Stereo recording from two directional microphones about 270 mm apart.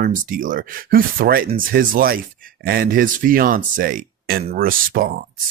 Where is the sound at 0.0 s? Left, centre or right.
Right.